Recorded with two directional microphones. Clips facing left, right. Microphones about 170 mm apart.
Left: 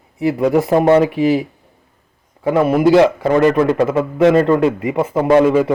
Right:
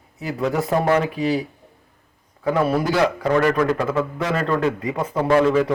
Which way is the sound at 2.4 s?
20° left (ahead or behind).